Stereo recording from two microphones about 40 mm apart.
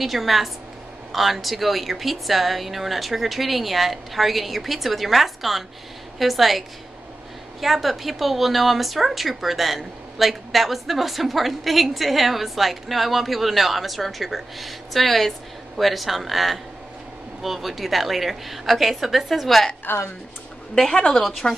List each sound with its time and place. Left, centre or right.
0.0 s speech: centre
7.6 s speech: centre
21.4 s speech: left